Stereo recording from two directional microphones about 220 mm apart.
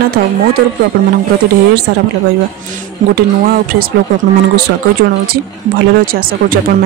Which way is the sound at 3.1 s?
40° right (ahead or behind).